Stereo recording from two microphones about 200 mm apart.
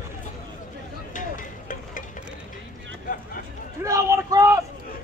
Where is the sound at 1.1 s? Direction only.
40° left (ahead or behind).